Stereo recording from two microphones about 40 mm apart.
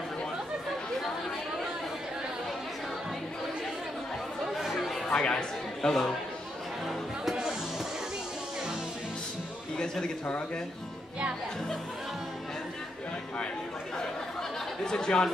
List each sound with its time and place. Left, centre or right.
4.6 s chatter: centre
5.1 s speech: centre
9.8 s a man's voice: centre
14.9 s speech: centre